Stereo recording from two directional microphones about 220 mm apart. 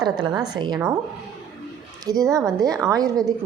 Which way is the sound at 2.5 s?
Centre (ahead or behind).